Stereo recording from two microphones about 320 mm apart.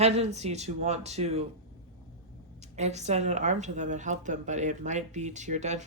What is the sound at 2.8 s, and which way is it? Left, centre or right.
Speech, right.